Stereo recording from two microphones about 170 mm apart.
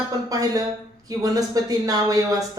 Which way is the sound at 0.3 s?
20° right (ahead or behind).